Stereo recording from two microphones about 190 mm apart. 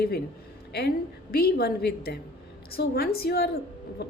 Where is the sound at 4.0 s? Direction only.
60° left (ahead or behind).